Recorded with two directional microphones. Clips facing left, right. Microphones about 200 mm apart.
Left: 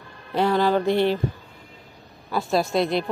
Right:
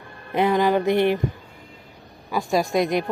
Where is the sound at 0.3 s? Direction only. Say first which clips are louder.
Right 1 dB; 15° right (ahead or behind).